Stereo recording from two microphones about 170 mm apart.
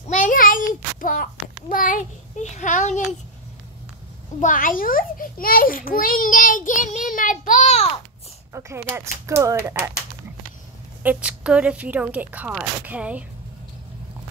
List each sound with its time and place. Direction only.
0.1 s a sound: 50° left (ahead or behind)
4.4 s a child's voice: 50° left (ahead or behind)
8.5 s speech: 15° right (ahead or behind)
11.0 s speech: 10° right (ahead or behind)